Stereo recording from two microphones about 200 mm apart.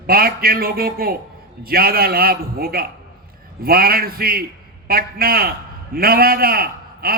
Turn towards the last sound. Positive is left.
turn(degrees=-50)  # may be behind; listen again after turning